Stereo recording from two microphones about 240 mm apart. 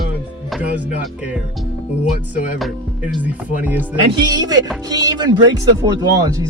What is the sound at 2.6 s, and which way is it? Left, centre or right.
Speech, centre.